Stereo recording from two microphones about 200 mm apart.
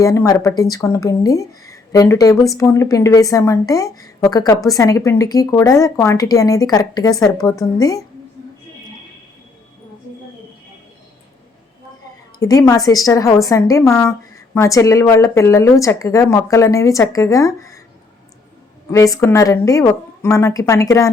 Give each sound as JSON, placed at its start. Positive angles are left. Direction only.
{"t": 0.0, "sound": "a woman's voice", "side_deg": 15}
{"t": 12.4, "sound": "a woman's voice", "side_deg": 15}
{"t": 18.9, "sound": "a woman's voice", "side_deg": 15}